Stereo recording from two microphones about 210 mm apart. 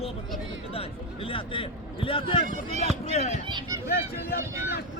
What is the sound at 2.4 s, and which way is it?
Speech, 40° right (ahead or behind).